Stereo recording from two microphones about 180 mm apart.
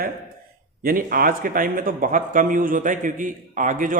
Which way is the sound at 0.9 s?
50° right (ahead or behind).